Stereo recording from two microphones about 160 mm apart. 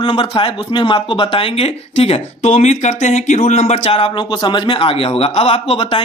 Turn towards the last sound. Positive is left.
turn(degrees=35)  # may be behind; listen again after turning